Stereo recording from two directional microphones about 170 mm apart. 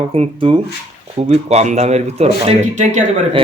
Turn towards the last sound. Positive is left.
turn(degrees=-40)  # may be behind; listen again after turning